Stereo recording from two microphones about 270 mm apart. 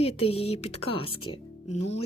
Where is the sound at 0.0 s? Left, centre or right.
Left.